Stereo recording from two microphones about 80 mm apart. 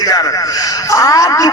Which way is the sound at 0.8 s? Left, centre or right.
Left.